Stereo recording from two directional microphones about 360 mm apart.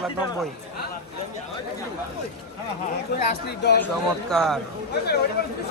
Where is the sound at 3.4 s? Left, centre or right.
Left.